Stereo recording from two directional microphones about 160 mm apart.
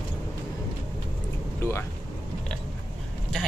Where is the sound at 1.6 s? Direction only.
15° left (ahead or behind).